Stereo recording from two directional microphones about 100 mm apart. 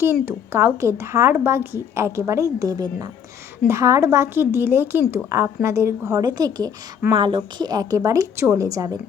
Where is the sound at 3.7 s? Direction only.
30° right (ahead or behind).